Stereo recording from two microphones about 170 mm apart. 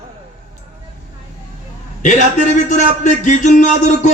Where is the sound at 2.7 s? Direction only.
45° left (ahead or behind).